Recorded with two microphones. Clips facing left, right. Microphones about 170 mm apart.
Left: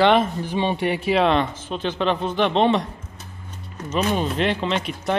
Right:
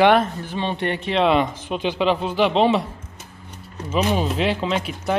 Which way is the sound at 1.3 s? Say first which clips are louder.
Right 2 dB; 15° right (ahead or behind).